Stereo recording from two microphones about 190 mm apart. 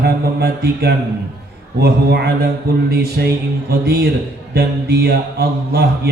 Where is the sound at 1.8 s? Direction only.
60° right (ahead or behind).